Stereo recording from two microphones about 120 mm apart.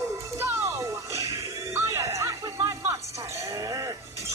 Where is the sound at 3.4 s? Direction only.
30° right (ahead or behind).